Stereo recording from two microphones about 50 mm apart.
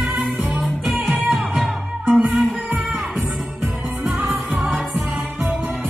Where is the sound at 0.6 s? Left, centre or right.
Centre.